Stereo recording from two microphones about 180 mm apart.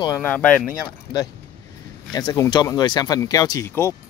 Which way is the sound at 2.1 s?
20° left (ahead or behind).